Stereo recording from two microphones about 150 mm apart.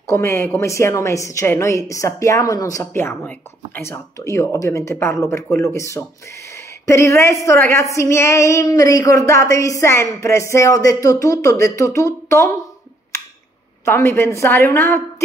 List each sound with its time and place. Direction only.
0.0 s a woman's voice: 20° left (ahead or behind)
13.8 s a woman's voice: 15° left (ahead or behind)